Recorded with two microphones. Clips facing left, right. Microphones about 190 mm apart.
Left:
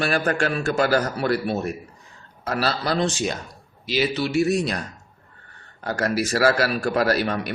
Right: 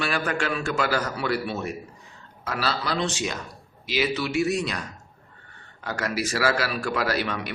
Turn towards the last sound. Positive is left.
turn(degrees=40)  # may be behind; listen again after turning